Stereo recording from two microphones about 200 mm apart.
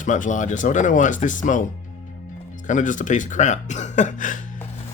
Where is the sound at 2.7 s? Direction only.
40° left (ahead or behind).